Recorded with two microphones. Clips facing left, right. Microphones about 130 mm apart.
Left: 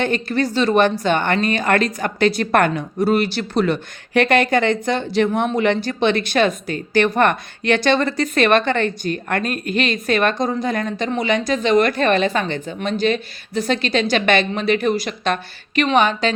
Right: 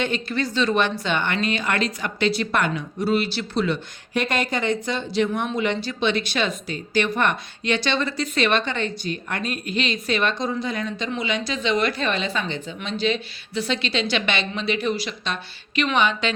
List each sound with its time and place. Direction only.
0.0 s speech: 45° left (ahead or behind)